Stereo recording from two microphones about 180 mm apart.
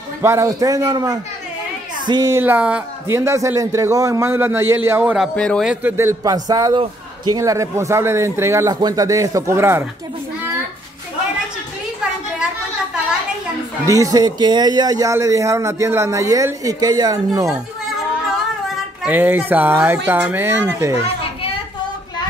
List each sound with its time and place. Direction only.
0.2 s a man's voice: 15° right (ahead or behind)
13.8 s a man's voice: 20° right (ahead or behind)
19.0 s a man's voice: 10° right (ahead or behind)